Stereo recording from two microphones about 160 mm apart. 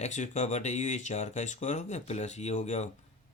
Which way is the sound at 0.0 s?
45° left (ahead or behind).